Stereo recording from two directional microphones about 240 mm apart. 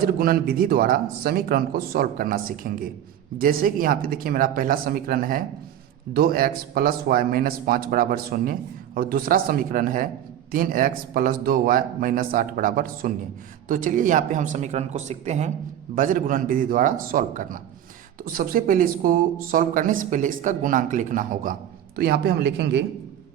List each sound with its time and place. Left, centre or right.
0.0 s speech: right